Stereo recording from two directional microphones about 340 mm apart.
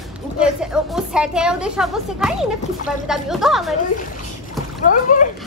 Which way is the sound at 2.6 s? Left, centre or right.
Left.